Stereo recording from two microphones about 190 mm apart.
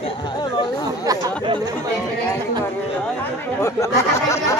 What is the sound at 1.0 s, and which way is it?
Chatter, 20° right (ahead or behind).